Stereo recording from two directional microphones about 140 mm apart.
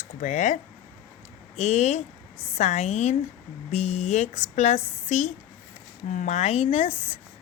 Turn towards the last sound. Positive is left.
turn(degrees=45)  # may be behind; listen again after turning